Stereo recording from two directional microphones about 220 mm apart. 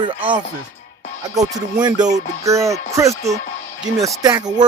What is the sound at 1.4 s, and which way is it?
Music, 15° right (ahead or behind).